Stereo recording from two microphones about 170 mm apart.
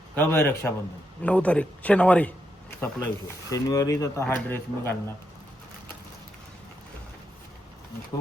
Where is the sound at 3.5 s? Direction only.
20° left (ahead or behind).